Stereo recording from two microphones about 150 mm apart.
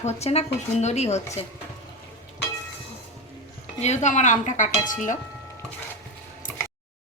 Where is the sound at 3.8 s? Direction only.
50° left (ahead or behind).